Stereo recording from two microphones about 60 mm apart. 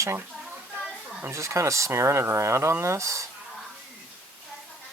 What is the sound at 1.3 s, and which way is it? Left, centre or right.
Speech, right.